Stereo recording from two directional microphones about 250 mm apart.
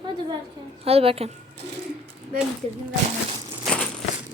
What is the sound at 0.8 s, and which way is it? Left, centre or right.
Speech, right.